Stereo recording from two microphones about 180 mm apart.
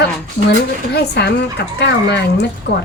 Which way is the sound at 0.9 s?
65° left (ahead or behind).